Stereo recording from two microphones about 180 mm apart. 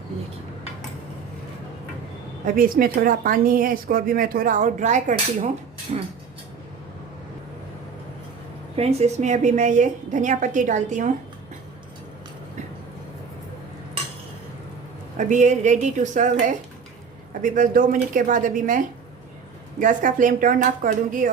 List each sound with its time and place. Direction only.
2.6 s speech: 55° right (ahead or behind)
8.7 s speech: 35° right (ahead or behind)
15.3 s speech: 40° right (ahead or behind)
19.8 s speech: 45° right (ahead or behind)